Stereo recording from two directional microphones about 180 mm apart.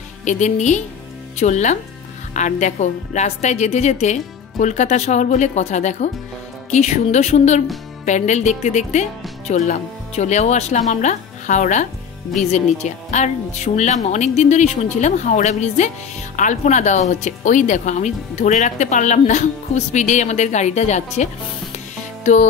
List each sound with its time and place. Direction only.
0.2 s speech: 40° left (ahead or behind)
22.2 s music: 40° left (ahead or behind)